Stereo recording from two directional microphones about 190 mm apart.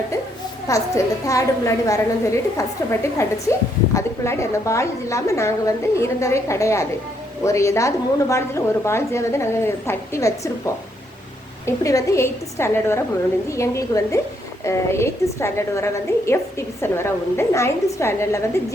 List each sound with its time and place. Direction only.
0.7 s a woman's voice: 15° left (ahead or behind)
11.6 s a woman's voice: 15° left (ahead or behind)